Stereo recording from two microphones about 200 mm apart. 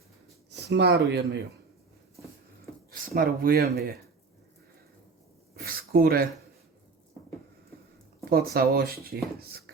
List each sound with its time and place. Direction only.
0.5 s speech: 55° right (ahead or behind)
3.1 s speech: 50° right (ahead or behind)
5.5 s a sound: 50° right (ahead or behind)
8.2 s speech: 50° right (ahead or behind)